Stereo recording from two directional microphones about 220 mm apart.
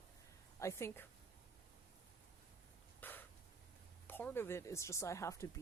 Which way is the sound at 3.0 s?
10° left (ahead or behind).